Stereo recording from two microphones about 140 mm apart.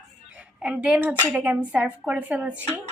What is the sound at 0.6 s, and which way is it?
A woman's voice, 10° right (ahead or behind).